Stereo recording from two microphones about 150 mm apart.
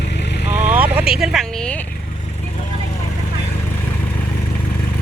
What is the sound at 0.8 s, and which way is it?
Vehicle, 5° right (ahead or behind).